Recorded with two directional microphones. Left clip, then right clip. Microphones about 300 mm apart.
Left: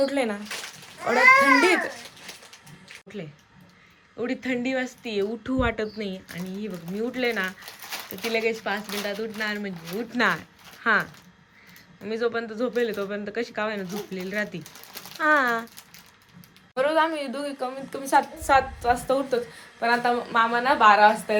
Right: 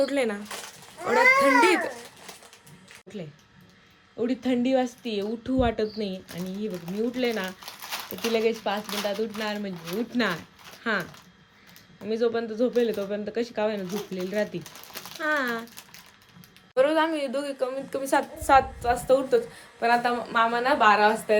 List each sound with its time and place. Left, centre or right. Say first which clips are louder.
0.0 s speech: left 1 dB; centre
4.2 s speech: right 1 dB; centre